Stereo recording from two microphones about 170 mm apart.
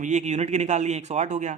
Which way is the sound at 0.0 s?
45° right (ahead or behind).